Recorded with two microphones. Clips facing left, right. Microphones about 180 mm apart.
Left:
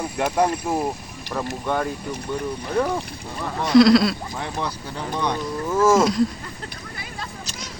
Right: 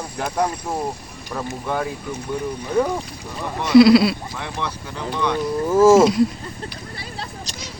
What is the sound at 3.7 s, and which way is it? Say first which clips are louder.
Speech: right 3 dB; 5° right (ahead or behind).